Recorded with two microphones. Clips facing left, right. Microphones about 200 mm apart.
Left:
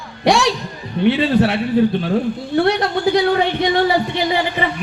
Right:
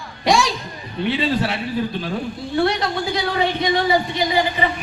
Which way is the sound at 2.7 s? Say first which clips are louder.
Left 6 dB; 65° left (ahead or behind).